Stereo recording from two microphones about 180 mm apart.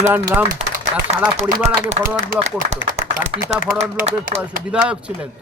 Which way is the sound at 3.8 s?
40° right (ahead or behind).